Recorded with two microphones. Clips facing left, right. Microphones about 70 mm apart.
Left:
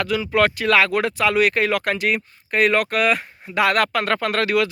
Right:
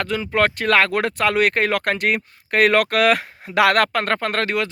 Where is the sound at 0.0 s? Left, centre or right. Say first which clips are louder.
Left 1 dB; right.